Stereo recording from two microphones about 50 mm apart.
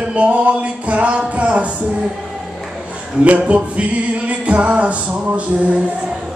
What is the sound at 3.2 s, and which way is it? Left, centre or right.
Speech, right.